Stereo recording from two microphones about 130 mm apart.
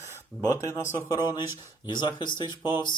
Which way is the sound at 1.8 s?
35° left (ahead or behind).